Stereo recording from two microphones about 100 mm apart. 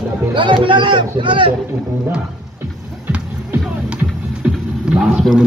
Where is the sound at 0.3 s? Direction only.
55° right (ahead or behind).